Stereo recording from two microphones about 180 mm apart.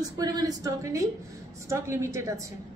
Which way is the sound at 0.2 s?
20° right (ahead or behind).